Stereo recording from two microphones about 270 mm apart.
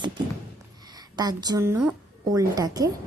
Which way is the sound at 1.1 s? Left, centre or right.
Centre.